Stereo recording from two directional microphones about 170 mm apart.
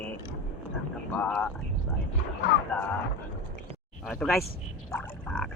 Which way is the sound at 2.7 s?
5° left (ahead or behind).